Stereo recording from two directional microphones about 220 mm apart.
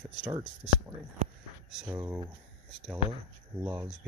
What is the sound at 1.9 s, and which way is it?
Speech, 10° right (ahead or behind).